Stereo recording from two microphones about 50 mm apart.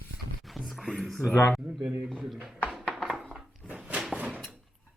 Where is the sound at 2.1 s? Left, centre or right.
Centre.